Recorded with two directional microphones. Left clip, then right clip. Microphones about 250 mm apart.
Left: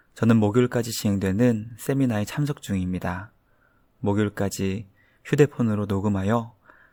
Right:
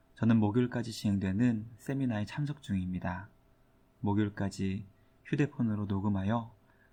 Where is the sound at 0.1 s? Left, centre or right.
Left.